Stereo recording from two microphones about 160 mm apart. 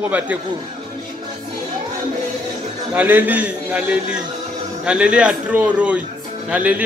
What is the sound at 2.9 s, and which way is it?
Speech, 10° right (ahead or behind).